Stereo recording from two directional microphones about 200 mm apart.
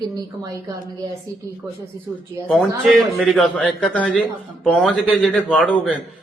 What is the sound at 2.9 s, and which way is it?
Speech, centre (ahead or behind).